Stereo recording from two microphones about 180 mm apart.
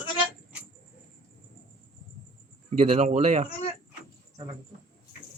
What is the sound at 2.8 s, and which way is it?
Speech, 40° right (ahead or behind).